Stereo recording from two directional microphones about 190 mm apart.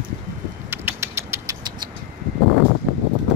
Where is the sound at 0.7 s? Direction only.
15° right (ahead or behind).